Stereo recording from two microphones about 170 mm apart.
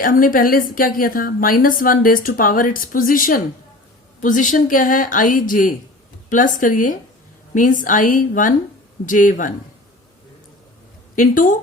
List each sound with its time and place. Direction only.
0.0 s a woman's voice: 55° left (ahead or behind)
11.1 s a woman's voice: 50° left (ahead or behind)